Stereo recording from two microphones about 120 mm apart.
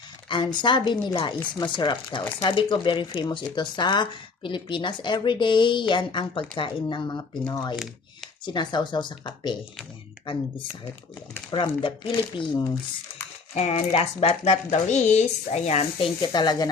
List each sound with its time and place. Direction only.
0.3 s speech: 40° left (ahead or behind)
11.5 s speech: 45° left (ahead or behind)
13.5 s speech: 60° left (ahead or behind)
16.3 s speech: 35° left (ahead or behind)